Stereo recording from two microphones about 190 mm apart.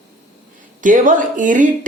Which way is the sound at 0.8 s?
45° right (ahead or behind).